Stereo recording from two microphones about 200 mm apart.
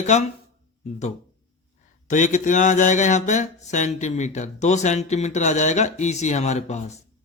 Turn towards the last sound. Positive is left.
turn(degrees=35)  # may be behind; listen again after turning